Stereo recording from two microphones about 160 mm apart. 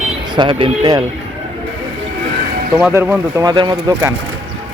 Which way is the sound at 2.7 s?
15° right (ahead or behind).